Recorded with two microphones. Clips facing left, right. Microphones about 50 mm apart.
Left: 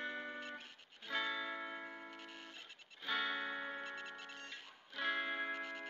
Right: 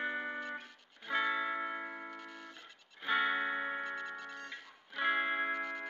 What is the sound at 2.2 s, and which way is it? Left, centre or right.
Music, right.